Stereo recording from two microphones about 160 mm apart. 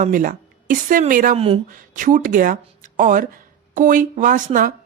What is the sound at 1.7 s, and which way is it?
Speech, 55° right (ahead or behind).